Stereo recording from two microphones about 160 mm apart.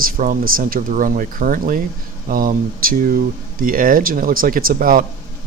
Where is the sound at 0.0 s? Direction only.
60° right (ahead or behind).